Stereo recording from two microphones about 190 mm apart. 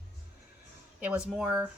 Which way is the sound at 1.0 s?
5° right (ahead or behind).